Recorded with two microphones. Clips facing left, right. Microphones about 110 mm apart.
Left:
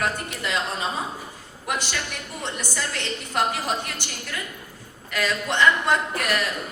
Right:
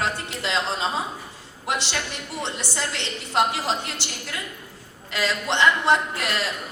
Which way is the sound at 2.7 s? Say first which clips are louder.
Even; 20° right (ahead or behind).